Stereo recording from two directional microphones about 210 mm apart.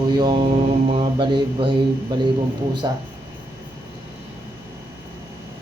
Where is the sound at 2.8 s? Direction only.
20° right (ahead or behind).